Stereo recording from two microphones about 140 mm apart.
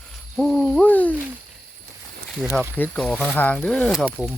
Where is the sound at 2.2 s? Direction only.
Centre (ahead or behind).